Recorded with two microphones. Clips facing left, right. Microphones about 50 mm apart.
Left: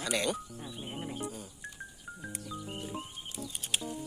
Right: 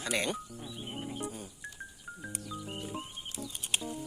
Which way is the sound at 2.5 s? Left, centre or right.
Centre.